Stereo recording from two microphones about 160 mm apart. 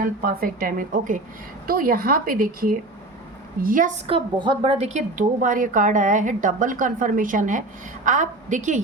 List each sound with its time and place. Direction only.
0.0 s a woman's voice: 65° right (ahead or behind)
4.0 s a woman's voice: 30° right (ahead or behind); by 8.8 s 50° right (ahead or behind)